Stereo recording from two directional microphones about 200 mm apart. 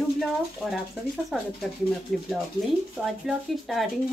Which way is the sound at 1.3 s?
Centre (ahead or behind).